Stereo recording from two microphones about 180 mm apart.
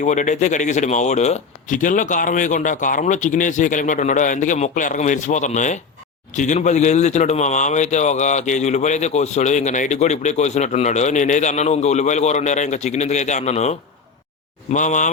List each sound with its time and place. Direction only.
0.0 s a man's voice: 45° left (ahead or behind)